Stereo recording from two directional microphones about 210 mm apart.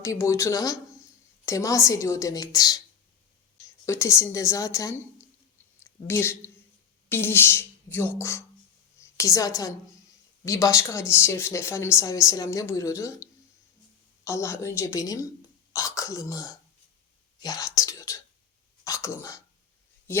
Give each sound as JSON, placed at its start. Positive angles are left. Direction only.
{"t": 0.0, "sound": "speech", "side_deg": 15}
{"t": 3.8, "sound": "speech", "side_deg": 15}
{"t": 7.1, "sound": "a sound", "side_deg": 10}
{"t": 8.2, "sound": "a woman's voice", "side_deg": 15}
{"t": 14.3, "sound": "speech", "side_deg": 15}
{"t": 17.7, "sound": "whispering", "side_deg": 15}
{"t": 18.9, "sound": "speech", "side_deg": 15}